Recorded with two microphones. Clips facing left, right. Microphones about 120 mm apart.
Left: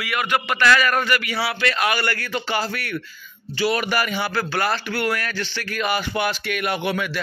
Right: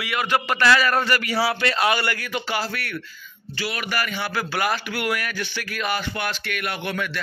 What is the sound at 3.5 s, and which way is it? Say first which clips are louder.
Speech: left 7 dB; 30° left (ahead or behind).